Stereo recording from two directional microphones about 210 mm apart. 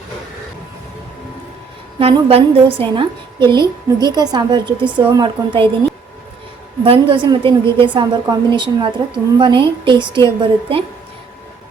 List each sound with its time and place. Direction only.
2.0 s a woman's voice: 30° right (ahead or behind)
6.8 s a woman's voice: 25° right (ahead or behind)